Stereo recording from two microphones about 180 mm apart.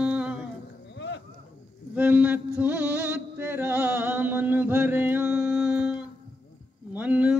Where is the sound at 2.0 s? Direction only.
10° right (ahead or behind).